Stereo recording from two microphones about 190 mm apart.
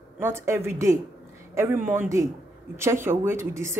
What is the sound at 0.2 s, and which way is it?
A woman's voice, 15° right (ahead or behind).